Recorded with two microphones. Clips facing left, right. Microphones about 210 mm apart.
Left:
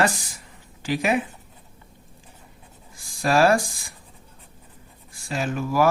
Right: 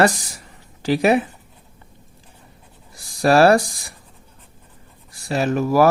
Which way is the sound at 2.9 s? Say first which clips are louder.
Right 4 dB; 40° right (ahead or behind).